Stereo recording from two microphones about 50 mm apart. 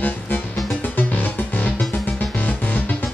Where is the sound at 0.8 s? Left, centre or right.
Left.